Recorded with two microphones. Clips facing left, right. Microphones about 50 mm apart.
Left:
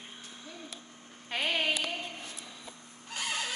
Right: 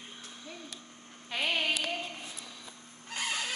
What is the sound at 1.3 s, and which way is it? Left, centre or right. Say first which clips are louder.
Child singing: even; left.